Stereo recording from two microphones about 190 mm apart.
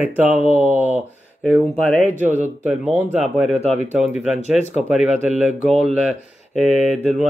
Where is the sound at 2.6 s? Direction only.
5° right (ahead or behind).